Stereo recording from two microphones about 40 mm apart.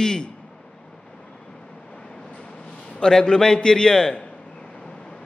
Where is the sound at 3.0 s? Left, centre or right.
Centre.